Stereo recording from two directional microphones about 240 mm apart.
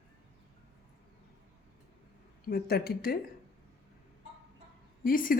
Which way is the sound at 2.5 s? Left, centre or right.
Left.